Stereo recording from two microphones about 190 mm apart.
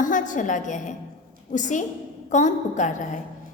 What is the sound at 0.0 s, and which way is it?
A woman's voice, 45° left (ahead or behind).